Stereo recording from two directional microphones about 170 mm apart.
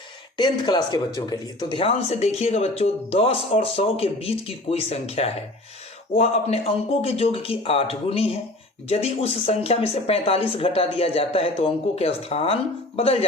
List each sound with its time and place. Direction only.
0.3 s speech: 25° left (ahead or behind)